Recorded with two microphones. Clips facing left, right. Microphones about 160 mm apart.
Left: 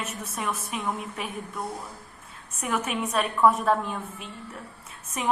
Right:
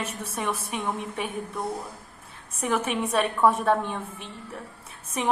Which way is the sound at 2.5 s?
30° right (ahead or behind).